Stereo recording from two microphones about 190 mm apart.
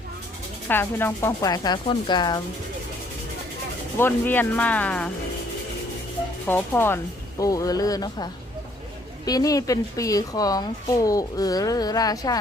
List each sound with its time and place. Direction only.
0.7 s speech: 10° left (ahead or behind)
3.9 s speech: 10° left (ahead or behind)
6.5 s speech: 10° left (ahead or behind)